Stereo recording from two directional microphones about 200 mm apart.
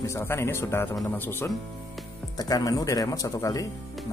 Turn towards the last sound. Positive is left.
turn(degrees=15)  # may be behind; listen again after turning